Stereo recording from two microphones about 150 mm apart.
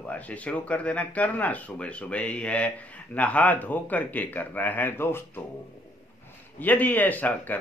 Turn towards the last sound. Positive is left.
turn(degrees=10)  # may be behind; listen again after turning